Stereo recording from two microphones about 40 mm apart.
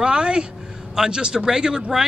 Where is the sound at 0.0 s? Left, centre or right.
Right.